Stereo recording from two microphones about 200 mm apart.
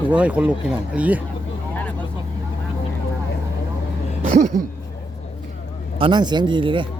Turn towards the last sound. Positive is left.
turn(degrees=-25)  # may be behind; listen again after turning